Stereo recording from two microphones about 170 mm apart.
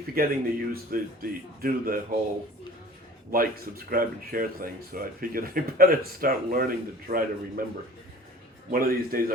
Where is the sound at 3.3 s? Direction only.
60° right (ahead or behind).